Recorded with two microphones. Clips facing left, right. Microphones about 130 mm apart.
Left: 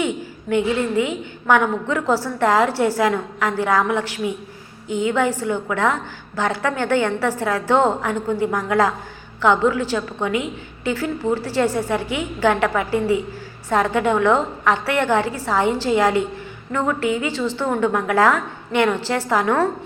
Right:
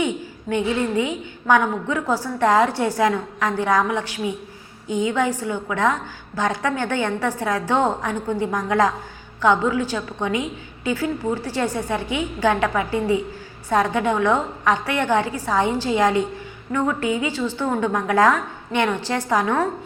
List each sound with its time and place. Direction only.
0.4 s a woman's voice: 25° right (ahead or behind)
17.7 s a woman's voice: 25° right (ahead or behind)